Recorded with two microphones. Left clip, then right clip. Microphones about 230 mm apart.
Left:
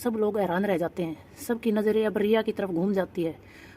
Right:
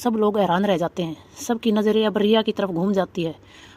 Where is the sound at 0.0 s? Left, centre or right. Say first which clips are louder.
Right 6 dB; centre.